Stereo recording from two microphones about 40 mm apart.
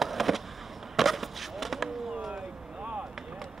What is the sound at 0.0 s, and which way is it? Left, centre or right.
Skateboard, centre.